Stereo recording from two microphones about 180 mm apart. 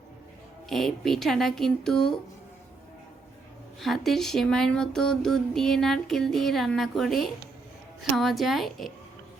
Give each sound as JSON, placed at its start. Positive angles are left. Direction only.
{"t": 0.7, "sound": "speech", "side_deg": 0}
{"t": 3.8, "sound": "speech", "side_deg": 0}